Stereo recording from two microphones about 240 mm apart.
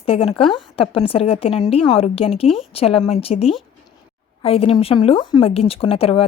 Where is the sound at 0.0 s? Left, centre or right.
Left.